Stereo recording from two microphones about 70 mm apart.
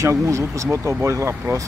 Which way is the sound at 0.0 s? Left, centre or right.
Right.